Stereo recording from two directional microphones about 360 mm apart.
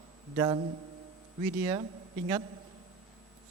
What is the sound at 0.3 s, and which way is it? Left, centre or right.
A man's voice, centre.